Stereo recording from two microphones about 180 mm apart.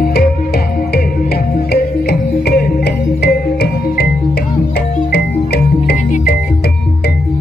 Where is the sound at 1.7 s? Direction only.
65° left (ahead or behind).